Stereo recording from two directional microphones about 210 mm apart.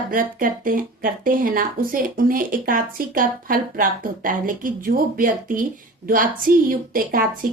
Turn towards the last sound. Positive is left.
turn(degrees=-40)  # may be behind; listen again after turning